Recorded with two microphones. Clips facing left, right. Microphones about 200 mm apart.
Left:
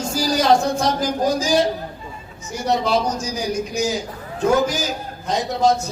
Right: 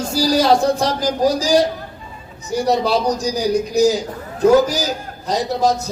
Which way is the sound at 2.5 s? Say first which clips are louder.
Right 3 dB; 35° right (ahead or behind).